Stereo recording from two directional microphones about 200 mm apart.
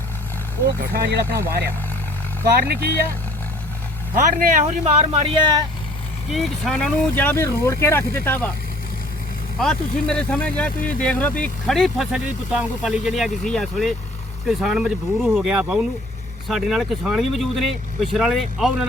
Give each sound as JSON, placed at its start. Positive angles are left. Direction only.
{"t": 1.3, "sound": "speech", "side_deg": -15}
{"t": 2.6, "sound": "speech", "side_deg": -50}
{"t": 4.1, "sound": "speech", "side_deg": -40}
{"t": 6.3, "sound": "speech", "side_deg": 0}
{"t": 9.6, "sound": "speech", "side_deg": 5}